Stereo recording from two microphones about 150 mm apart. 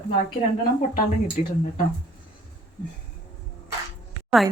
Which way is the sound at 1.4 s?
55° left (ahead or behind).